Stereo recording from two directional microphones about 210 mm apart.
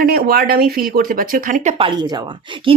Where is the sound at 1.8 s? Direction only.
20° right (ahead or behind).